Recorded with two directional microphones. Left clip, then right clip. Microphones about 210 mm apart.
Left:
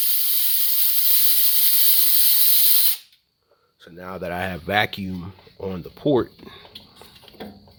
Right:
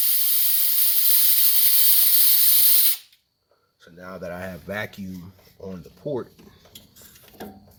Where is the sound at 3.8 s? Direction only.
55° left (ahead or behind).